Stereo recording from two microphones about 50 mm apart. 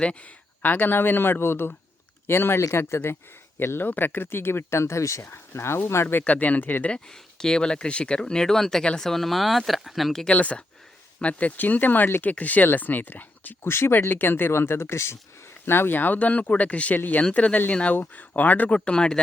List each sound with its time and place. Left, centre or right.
0.0 s speech: left
0.6 s speech: left
2.6 s speech: left
3.8 s speech: left
4.8 s speech: left
5.2 s speech: left
6.2 s speech: left
6.9 s speech: centre
10.3 s speech: left
12.3 s speech: left
13.6 s speech: left
15.6 s speech: left
18.9 s speech: centre